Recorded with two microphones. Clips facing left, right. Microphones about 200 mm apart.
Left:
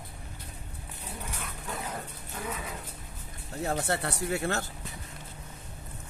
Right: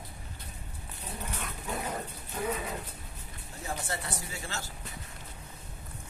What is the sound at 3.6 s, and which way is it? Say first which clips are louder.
Speech: left 7 dB; 65° left (ahead or behind).